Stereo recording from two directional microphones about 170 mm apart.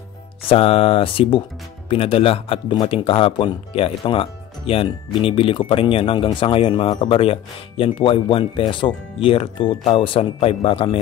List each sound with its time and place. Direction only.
0.5 s speech: 35° left (ahead or behind)